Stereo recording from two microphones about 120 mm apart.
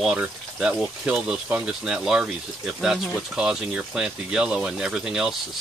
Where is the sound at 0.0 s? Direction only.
5° right (ahead or behind).